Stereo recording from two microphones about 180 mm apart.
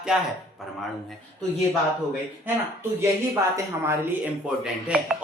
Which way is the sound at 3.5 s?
15° right (ahead or behind).